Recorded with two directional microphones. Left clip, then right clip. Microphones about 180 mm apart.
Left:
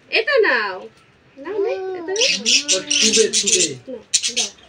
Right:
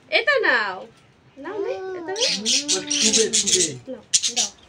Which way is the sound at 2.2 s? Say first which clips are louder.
Left 4 dB; 55° right (ahead or behind).